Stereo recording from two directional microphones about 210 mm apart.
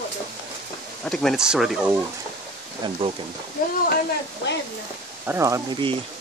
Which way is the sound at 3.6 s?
40° left (ahead or behind).